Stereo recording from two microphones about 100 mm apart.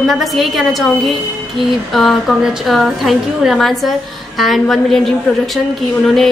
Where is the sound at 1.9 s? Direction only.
Centre (ahead or behind).